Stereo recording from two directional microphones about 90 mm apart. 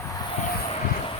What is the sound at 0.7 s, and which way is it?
Vehicle, 90° left.